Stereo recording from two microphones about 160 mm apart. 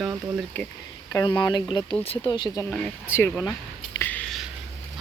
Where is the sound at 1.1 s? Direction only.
25° left (ahead or behind).